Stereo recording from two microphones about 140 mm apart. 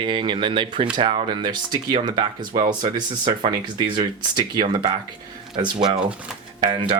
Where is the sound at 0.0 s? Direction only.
35° right (ahead or behind).